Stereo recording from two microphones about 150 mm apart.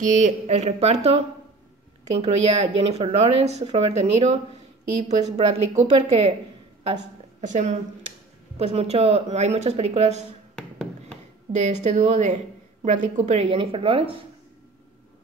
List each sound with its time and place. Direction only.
0.0 s speech: 55° right (ahead or behind)
2.2 s speech: 45° right (ahead or behind)
8.5 s speech: 45° right (ahead or behind)
10.5 s a sound: 5° left (ahead or behind)
11.5 s a woman's voice: 50° right (ahead or behind)